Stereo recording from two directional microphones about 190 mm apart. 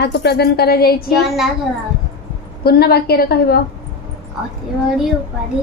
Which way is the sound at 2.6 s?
55° left (ahead or behind).